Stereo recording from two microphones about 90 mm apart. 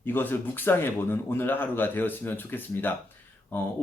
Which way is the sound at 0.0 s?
25° left (ahead or behind).